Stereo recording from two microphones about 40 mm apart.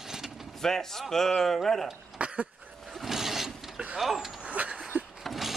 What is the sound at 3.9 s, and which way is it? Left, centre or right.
Speech, centre.